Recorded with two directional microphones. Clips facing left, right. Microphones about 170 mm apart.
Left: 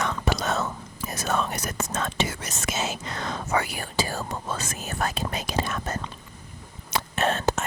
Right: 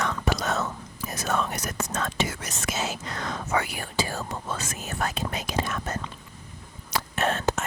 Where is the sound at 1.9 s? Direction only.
20° left (ahead or behind).